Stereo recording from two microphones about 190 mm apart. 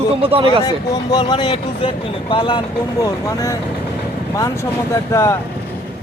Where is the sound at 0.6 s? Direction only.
20° left (ahead or behind).